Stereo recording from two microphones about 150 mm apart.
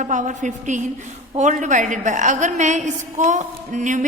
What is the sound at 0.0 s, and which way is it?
A woman's voice, 55° right (ahead or behind).